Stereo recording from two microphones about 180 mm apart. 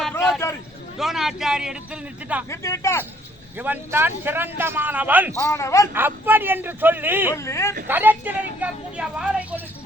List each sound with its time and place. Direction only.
0.4 s a sound: 15° left (ahead or behind)
0.9 s a man's voice: centre (ahead or behind)
2.5 s speech: 15° left (ahead or behind)
3.6 s a man's voice: 10° right (ahead or behind)
5.4 s speech: 15° left (ahead or behind)
5.9 s a man's voice: 10° right (ahead or behind)
7.3 s speech: 15° left (ahead or behind)
7.9 s a man's voice: 10° right (ahead or behind)